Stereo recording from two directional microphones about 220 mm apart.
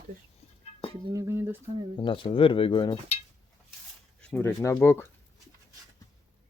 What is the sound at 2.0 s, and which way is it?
Speech, 25° left (ahead or behind).